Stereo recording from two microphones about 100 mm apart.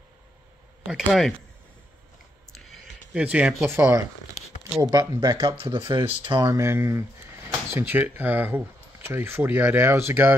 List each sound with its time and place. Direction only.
0.8 s speech: 5° right (ahead or behind)
3.2 s speech: 10° right (ahead or behind)
3.6 s speech: 25° right (ahead or behind)
4.6 s speech: 5° right (ahead or behind)
4.9 s speech: 40° right (ahead or behind)
5.4 s speech: 70° right (ahead or behind)
5.9 s speech: 50° right (ahead or behind)
6.4 s speech: 30° right (ahead or behind)